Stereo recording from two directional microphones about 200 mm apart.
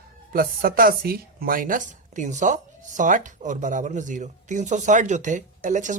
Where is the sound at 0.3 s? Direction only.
45° right (ahead or behind).